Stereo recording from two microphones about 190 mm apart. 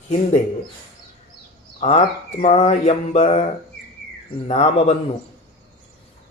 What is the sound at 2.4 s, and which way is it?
Speech, 35° left (ahead or behind).